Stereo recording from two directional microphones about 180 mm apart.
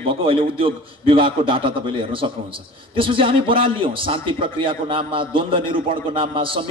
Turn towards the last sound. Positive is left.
turn(degrees=-30)  # may be behind; listen again after turning